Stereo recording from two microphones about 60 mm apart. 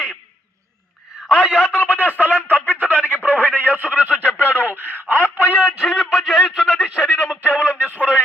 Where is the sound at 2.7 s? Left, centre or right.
Right.